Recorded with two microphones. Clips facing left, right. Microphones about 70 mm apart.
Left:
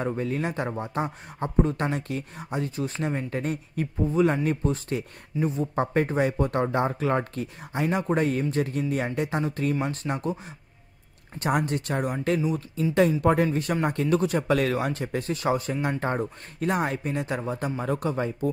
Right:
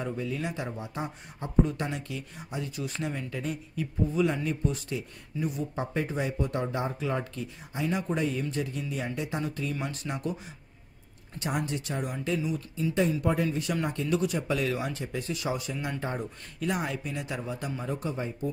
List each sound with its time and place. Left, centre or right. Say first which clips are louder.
0.0 s a man's voice: left 5 dB; left
11.3 s a man's voice: left 6 dB; left
17.8 s speech: left 6 dB; left